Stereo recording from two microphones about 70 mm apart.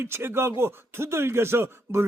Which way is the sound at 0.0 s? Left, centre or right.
Right.